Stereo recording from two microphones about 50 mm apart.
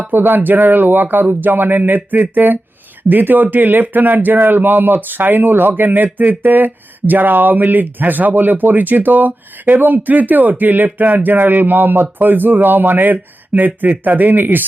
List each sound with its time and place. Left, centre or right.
0.1 s a man's voice: right